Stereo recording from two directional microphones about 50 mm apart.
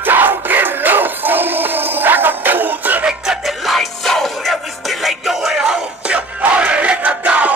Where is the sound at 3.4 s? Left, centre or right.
Centre.